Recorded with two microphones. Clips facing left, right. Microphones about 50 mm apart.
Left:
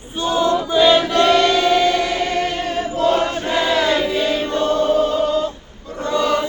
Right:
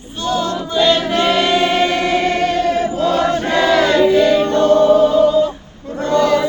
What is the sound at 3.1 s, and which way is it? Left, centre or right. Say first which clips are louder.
Choir: right 4 dB; right.